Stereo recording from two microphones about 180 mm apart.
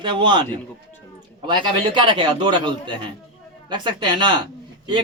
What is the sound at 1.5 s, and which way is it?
A man's voice, 25° right (ahead or behind).